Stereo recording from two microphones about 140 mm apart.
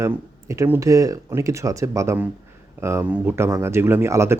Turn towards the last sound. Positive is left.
turn(degrees=-20)  # may be behind; listen again after turning